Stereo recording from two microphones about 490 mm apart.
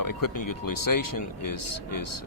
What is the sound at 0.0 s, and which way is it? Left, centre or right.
Speech, left.